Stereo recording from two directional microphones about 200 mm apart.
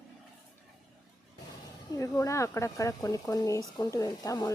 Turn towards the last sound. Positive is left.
turn(degrees=15)  # may be behind; listen again after turning